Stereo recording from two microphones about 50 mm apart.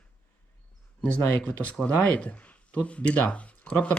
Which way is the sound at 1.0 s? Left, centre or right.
Left.